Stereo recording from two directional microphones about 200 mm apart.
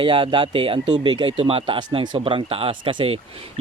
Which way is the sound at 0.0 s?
25° right (ahead or behind).